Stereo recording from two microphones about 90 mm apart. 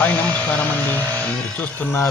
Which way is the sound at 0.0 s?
15° left (ahead or behind).